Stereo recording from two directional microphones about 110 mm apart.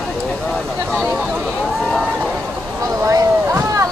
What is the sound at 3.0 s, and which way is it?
Boat, 25° right (ahead or behind).